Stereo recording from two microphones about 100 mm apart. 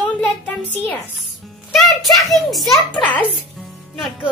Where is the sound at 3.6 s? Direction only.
Centre (ahead or behind).